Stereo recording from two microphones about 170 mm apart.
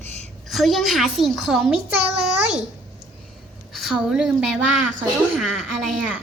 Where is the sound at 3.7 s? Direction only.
Centre (ahead or behind).